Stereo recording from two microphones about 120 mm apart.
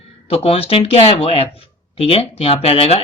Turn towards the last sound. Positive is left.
turn(degrees=55)  # may be behind; listen again after turning